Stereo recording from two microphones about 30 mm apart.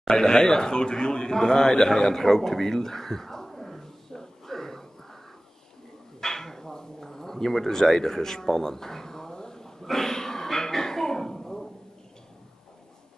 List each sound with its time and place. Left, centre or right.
0.1 s a man's voice: left
1.3 s a sound: centre
6.2 s bow-wow: centre